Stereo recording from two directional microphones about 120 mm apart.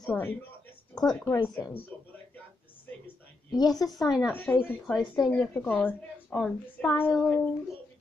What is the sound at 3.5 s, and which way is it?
Speech, 30° left (ahead or behind).